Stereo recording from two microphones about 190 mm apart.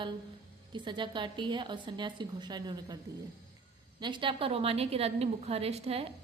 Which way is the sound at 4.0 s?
25° right (ahead or behind).